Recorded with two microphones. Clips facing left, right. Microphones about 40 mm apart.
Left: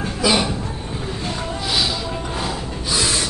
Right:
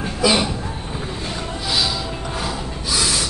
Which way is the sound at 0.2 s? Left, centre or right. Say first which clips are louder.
Right 1 dB; centre.